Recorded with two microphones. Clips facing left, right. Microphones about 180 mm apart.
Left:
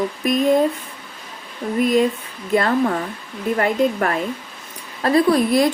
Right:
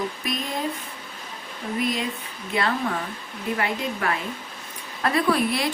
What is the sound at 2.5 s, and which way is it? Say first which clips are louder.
Speech: left 7 dB; 45° left (ahead or behind).